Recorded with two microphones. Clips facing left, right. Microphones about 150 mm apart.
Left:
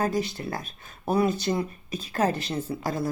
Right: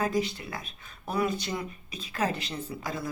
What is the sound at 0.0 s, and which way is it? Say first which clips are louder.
Speech: left 2 dB; 35° left (ahead or behind).